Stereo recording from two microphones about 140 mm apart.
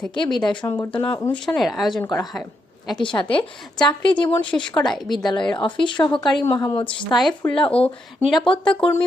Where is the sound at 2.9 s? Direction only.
35° left (ahead or behind).